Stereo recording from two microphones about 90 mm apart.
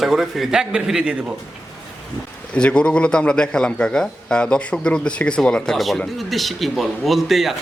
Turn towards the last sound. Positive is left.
turn(degrees=0)  # may be behind; listen again after turning